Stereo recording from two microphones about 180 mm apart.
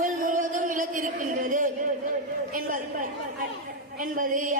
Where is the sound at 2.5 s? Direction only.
50° right (ahead or behind).